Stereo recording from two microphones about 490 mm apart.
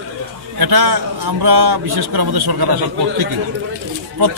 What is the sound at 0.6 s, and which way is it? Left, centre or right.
A man's voice, right.